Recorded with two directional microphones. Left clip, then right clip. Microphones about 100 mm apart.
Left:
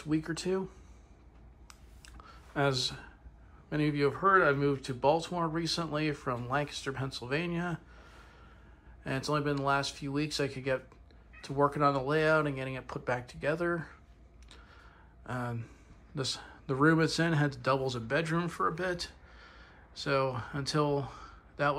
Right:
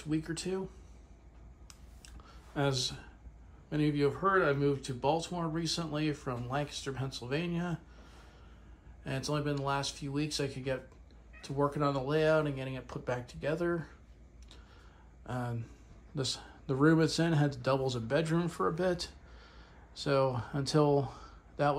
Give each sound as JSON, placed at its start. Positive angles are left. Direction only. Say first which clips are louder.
{"t": 0.0, "sound": "speech", "louder": "left 3 dB", "side_deg": -15}
{"t": 1.7, "sound": "a sound", "louder": "left 2 dB", "side_deg": -25}
{"t": 3.7, "sound": "speech", "louder": "left 1 dB", "side_deg": -25}
{"t": 15.2, "sound": "speech", "louder": "left 2 dB", "side_deg": -35}
{"t": 18.8, "sound": "speech", "louder": "right 2 dB", "side_deg": -55}